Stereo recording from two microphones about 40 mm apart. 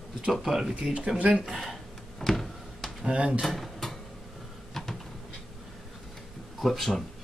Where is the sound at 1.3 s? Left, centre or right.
Centre.